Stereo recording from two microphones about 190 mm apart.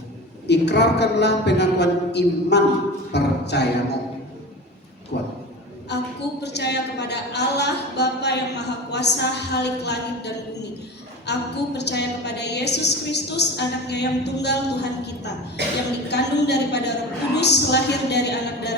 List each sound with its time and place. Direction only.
0.4 s a woman's voice: 60° left (ahead or behind)
5.1 s a woman's voice: 65° left (ahead or behind)
15.6 s a woman's voice: 65° right (ahead or behind)
16.0 s a woman's voice: 60° left (ahead or behind)